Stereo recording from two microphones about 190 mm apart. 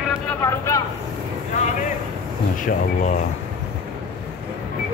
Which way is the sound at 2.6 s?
40° left (ahead or behind).